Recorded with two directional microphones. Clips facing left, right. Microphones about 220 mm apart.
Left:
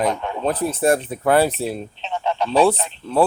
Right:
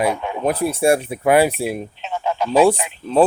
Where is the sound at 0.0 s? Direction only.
10° right (ahead or behind).